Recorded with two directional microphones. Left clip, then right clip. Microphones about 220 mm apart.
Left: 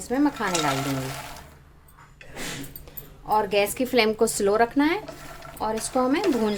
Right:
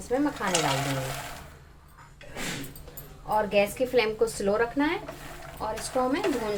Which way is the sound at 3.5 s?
45° left (ahead or behind).